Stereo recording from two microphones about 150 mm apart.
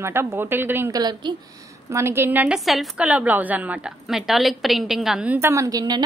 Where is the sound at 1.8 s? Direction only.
15° right (ahead or behind).